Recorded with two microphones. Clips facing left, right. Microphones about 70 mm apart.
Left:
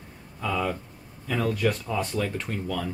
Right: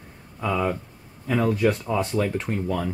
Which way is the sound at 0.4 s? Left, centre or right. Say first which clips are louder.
Right 3 dB; centre.